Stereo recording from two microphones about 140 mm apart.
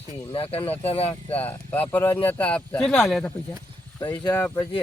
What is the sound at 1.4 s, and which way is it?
Speech, 10° left (ahead or behind).